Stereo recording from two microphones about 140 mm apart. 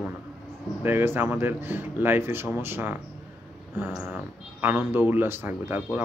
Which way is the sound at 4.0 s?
15° right (ahead or behind).